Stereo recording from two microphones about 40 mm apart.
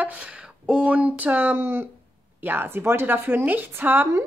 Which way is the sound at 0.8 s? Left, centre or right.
Right.